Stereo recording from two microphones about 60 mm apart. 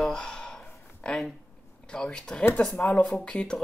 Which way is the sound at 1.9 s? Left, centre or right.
Centre.